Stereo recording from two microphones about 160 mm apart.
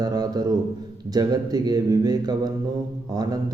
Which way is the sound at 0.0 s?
25° right (ahead or behind).